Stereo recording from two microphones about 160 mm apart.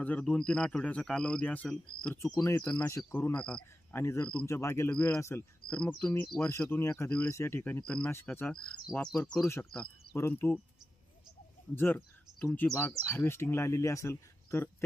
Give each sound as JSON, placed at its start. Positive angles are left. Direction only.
{"t": 0.0, "sound": "speech", "side_deg": 10}
{"t": 11.7, "sound": "speech", "side_deg": 10}